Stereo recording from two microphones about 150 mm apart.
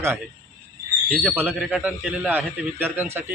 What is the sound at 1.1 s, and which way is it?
Speech, 10° right (ahead or behind).